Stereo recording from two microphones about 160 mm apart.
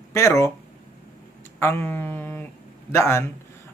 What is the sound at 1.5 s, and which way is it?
A man's voice, 15° left (ahead or behind).